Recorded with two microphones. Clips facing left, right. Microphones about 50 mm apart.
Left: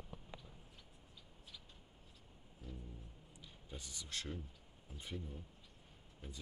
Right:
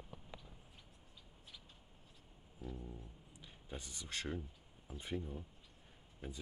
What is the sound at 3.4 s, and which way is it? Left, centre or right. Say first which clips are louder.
Speech: right 3 dB; right.